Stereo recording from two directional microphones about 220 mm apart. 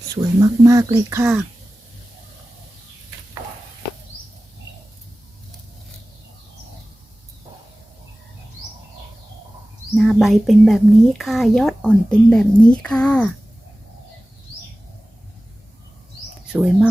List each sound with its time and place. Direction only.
0.1 s speech: 15° right (ahead or behind)
9.9 s speech: centre (ahead or behind)
16.5 s speech: 5° right (ahead or behind)